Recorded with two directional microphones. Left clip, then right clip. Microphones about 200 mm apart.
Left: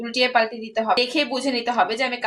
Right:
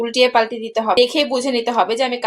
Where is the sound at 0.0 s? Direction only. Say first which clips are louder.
Right 5 dB; 40° right (ahead or behind).